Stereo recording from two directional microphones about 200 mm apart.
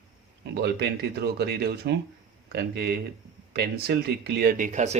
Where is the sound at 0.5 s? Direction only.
55° right (ahead or behind).